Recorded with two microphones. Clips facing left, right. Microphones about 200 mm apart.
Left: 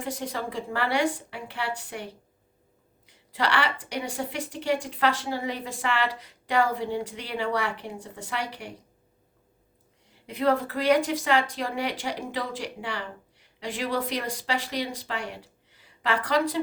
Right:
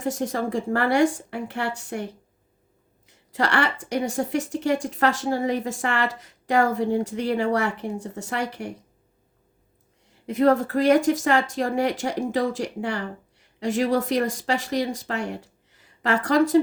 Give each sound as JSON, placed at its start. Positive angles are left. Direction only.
{"t": 0.0, "sound": "speech", "side_deg": -45}
{"t": 3.1, "sound": "speech", "side_deg": -45}
{"t": 10.2, "sound": "speech", "side_deg": -45}